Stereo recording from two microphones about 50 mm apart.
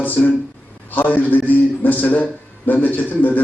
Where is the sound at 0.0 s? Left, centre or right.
Left.